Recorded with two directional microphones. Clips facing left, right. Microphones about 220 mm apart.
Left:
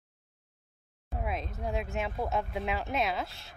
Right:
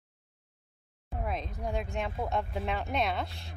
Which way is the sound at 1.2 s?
Centre (ahead or behind).